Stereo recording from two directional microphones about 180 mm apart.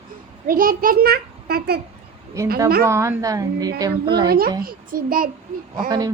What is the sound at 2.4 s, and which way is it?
A woman's voice, 15° right (ahead or behind).